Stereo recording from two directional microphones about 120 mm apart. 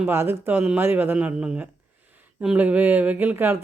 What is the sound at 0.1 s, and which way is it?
A woman's voice, 20° right (ahead or behind).